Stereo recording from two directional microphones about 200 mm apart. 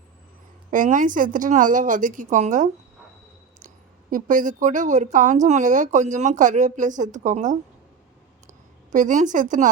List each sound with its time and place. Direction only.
0.7 s speech: 40° right (ahead or behind)
4.1 s speech: 40° right (ahead or behind)
8.9 s speech: 40° right (ahead or behind)